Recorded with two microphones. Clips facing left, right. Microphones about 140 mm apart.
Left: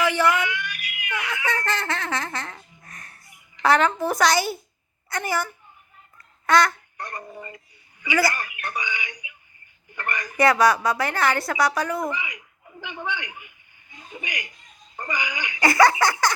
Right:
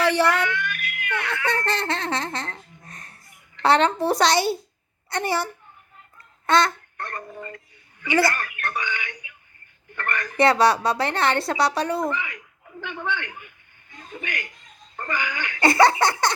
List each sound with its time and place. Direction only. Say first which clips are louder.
0.0 s a sound: right 1 dB; 35° right (ahead or behind)
0.3 s speech: right 2 dB; 10° left (ahead or behind)
1.5 s a woman's voice: right 2 dB; 25° right (ahead or behind)
6.4 s goose: even; 25° right (ahead or behind)
6.9 s speech: right 1 dB; 10° left (ahead or behind)
10.3 s a woman's voice: even; 30° right (ahead or behind)
12.0 s speech: right 2 dB; 10° left (ahead or behind)
15.6 s a woman's voice: right 1 dB; 25° right (ahead or behind)